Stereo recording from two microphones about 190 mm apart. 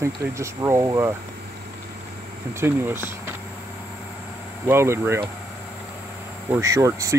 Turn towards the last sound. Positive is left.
turn(degrees=-15)  # may be behind; listen again after turning